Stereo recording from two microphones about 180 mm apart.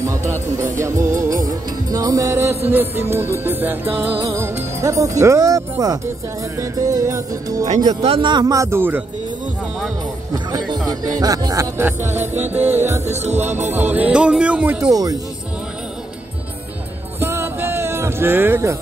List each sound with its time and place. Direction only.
0.7 s music: 15° right (ahead or behind)
1.1 s music: 45° right (ahead or behind)
1.9 s music: 20° right (ahead or behind)
10.3 s music: 20° right (ahead or behind)
13.0 s music: 40° right (ahead or behind)
13.8 s music: 10° right (ahead or behind)
14.9 s music: 20° right (ahead or behind)
17.2 s music: 15° right (ahead or behind)